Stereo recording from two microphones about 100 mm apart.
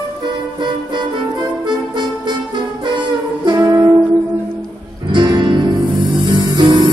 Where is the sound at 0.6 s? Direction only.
50° right (ahead or behind).